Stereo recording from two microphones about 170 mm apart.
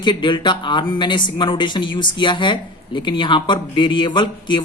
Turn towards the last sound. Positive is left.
turn(degrees=30)  # may be behind; listen again after turning